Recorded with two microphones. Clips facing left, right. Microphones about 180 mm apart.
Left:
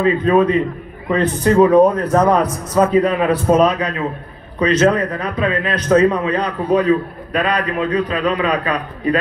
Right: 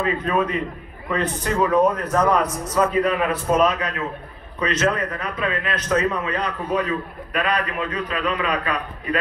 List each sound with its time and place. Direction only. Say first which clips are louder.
0.0 s a man's voice: left 8 dB; 30° left (ahead or behind)